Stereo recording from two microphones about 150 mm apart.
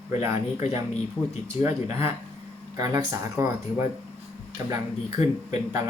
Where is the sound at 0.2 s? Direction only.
20° right (ahead or behind).